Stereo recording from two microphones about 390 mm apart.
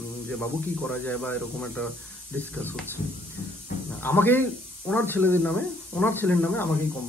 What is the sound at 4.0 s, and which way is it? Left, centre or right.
Speech, centre.